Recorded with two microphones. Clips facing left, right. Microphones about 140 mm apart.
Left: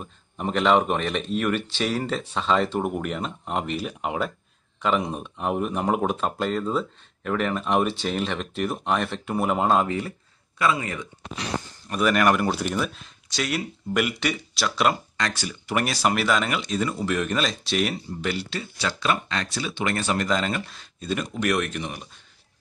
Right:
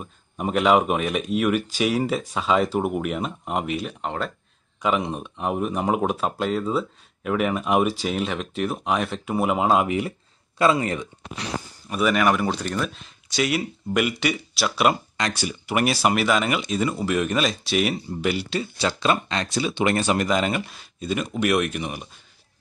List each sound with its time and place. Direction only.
0.0 s speech: 5° right (ahead or behind)
9.8 s speech: 15° right (ahead or behind)
10.6 s speech: 30° right (ahead or behind)
11.9 s speech: centre (ahead or behind)
18.5 s speech: 20° right (ahead or behind)